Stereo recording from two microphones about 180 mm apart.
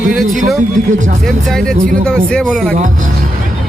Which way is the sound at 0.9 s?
45° right (ahead or behind).